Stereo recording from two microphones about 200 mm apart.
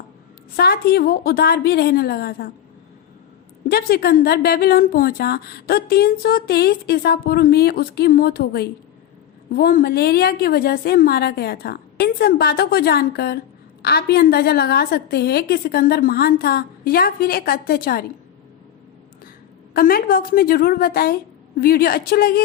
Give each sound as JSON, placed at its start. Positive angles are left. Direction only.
{"t": 0.5, "sound": "a woman's voice", "side_deg": 50}
{"t": 3.7, "sound": "a woman's voice", "side_deg": 50}
{"t": 19.7, "sound": "a woman's voice", "side_deg": 50}